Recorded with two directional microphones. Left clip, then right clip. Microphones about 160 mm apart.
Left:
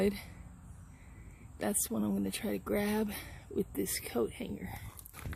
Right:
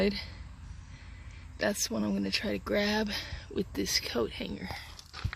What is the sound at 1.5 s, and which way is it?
Speech, 15° left (ahead or behind).